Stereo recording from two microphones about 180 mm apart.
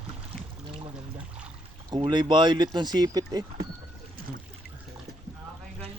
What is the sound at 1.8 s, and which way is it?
Speech, 25° right (ahead or behind).